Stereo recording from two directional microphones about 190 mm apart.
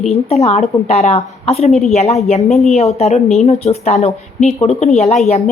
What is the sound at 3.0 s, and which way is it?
Speech, 35° left (ahead or behind).